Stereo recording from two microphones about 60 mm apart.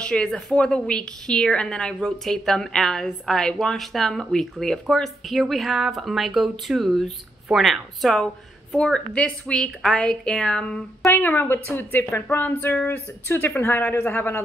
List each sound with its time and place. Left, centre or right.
0.0 s a woman's voice: centre
8.7 s a woman's voice: centre
11.1 s speech: left